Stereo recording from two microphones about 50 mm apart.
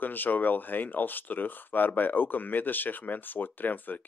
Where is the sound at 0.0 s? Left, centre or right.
Left.